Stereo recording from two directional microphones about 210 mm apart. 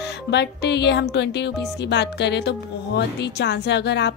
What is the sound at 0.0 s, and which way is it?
Music, 55° left (ahead or behind).